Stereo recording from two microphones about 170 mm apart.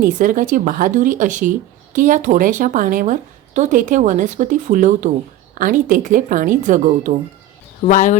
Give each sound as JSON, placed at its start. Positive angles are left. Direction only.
{"t": 0.2, "sound": "speech", "side_deg": -50}
{"t": 7.8, "sound": "speech", "side_deg": 45}